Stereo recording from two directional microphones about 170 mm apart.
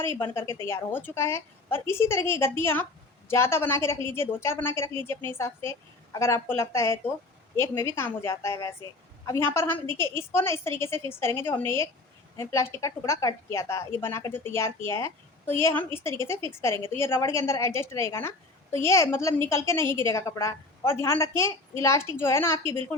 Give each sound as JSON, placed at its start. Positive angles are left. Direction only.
{"t": 0.0, "sound": "a woman's voice", "side_deg": 15}